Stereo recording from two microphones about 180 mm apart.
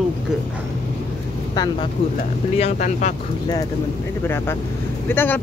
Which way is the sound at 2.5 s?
40° left (ahead or behind).